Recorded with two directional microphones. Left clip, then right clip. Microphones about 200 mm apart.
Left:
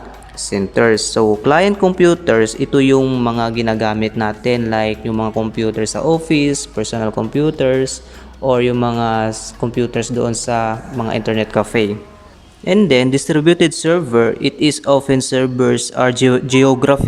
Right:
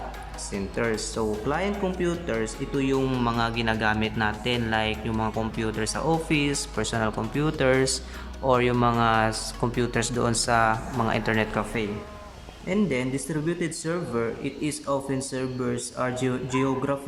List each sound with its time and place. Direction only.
0.5 s speech: 45° left (ahead or behind)
3.0 s speech: 20° left (ahead or behind)
11.5 s speech: 35° left (ahead or behind)